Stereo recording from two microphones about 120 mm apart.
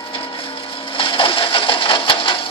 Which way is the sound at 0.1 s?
45° left (ahead or behind).